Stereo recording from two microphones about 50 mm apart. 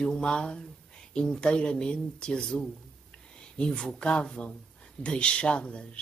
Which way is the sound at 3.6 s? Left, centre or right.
Centre.